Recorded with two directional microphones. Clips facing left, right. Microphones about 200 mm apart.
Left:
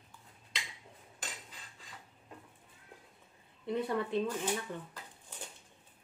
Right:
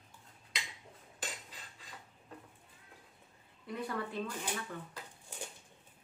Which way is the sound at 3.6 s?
25° left (ahead or behind).